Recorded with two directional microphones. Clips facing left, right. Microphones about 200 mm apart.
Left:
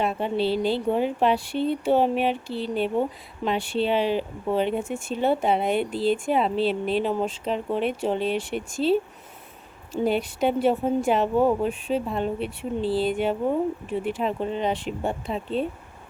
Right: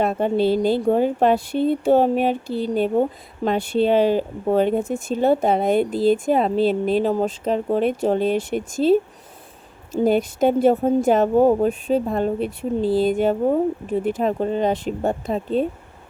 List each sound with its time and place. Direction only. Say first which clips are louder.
0.0 s a woman's voice: right 5 dB; 45° right (ahead or behind)
10.0 s a woman's voice: right 5 dB; 45° right (ahead or behind)